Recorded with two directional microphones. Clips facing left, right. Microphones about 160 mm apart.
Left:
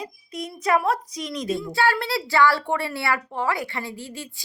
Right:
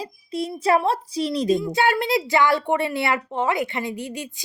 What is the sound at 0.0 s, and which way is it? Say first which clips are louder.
A woman's voice: right 5 dB; 30° right (ahead or behind).